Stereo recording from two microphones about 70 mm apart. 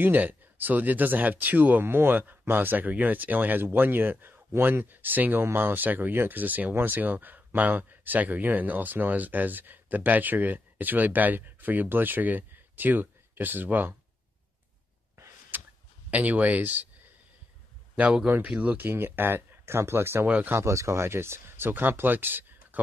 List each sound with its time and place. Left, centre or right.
0.0 s speech: right
15.5 s a sound: right
16.1 s speech: right
17.9 s speech: centre; by 20.2 s right
20.2 s speech: right
20.5 s speech: right